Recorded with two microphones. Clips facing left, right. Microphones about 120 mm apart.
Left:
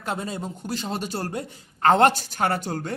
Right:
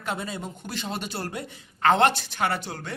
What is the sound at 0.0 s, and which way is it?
A man's voice, 40° left (ahead or behind).